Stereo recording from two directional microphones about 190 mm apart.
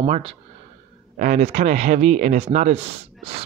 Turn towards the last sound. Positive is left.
turn(degrees=-35)  # may be behind; listen again after turning